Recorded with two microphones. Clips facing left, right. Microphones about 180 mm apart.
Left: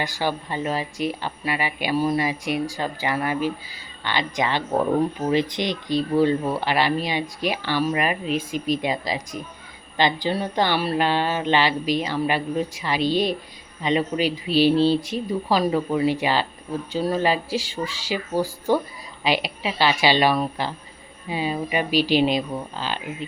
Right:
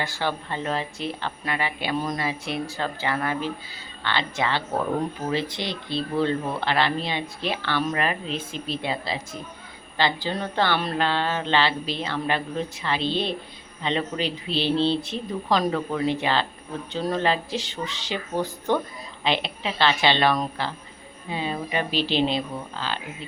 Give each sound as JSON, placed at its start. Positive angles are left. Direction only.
{"t": 0.0, "sound": "speech", "side_deg": 10}